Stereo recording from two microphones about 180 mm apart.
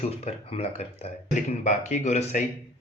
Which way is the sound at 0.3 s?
35° left (ahead or behind).